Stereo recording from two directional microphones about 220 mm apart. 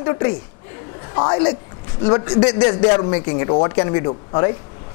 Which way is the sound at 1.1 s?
20° left (ahead or behind).